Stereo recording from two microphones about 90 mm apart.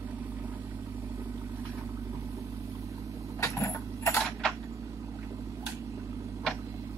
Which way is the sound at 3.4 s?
35° left (ahead or behind).